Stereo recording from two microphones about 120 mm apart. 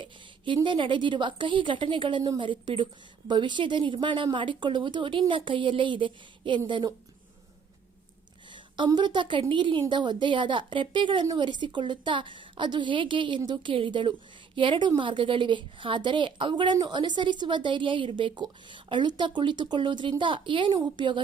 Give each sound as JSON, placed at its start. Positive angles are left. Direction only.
{"t": 0.0, "sound": "a woman's voice", "side_deg": -45}
{"t": 8.5, "sound": "a sound", "side_deg": -40}
{"t": 9.0, "sound": "a woman's voice", "side_deg": -40}